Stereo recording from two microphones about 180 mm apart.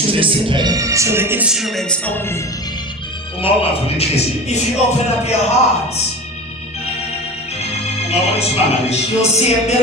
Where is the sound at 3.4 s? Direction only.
30° left (ahead or behind).